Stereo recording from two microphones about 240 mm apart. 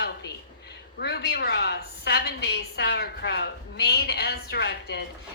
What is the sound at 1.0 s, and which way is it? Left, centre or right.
A woman's voice, left.